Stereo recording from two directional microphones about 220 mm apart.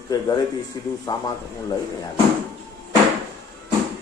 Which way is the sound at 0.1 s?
15° left (ahead or behind).